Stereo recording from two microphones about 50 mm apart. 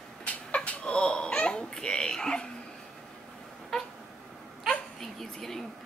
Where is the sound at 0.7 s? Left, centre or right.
Centre.